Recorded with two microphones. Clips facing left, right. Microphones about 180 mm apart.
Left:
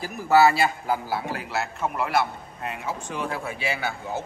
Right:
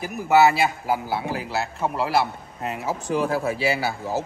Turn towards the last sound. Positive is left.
turn(degrees=-35)  # may be behind; listen again after turning